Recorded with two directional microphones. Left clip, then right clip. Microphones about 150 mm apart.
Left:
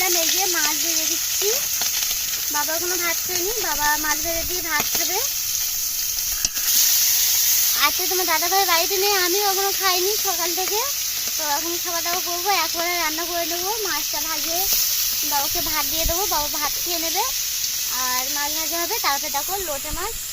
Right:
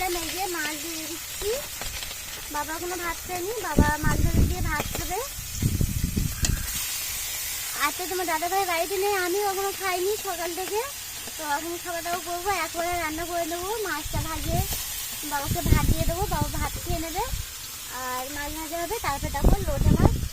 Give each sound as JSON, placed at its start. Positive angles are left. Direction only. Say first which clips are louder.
{"t": 7.8, "sound": "speech", "louder": "left 2 dB", "side_deg": 30}
{"t": 8.5, "sound": "speech", "louder": "left 7 dB", "side_deg": 20}
{"t": 12.5, "sound": "a child's voice", "louder": "left 5 dB", "side_deg": 20}